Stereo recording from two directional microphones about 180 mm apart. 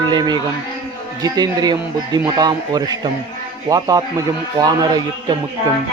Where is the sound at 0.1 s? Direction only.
25° right (ahead or behind).